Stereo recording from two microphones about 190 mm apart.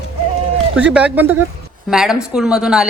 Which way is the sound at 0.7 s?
5° right (ahead or behind).